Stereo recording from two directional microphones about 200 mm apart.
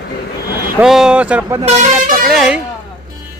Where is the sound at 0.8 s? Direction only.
Centre (ahead or behind).